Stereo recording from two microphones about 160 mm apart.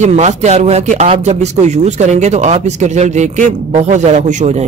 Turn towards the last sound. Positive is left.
turn(degrees=-45)  # may be behind; listen again after turning